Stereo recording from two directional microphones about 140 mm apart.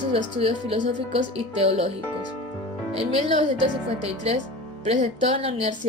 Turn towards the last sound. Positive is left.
turn(degrees=-45)  # may be behind; listen again after turning